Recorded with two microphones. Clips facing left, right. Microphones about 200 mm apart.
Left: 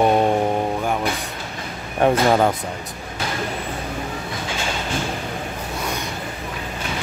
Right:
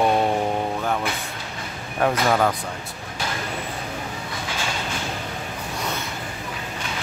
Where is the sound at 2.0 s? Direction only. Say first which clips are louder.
Left 4 dB; 25° left (ahead or behind).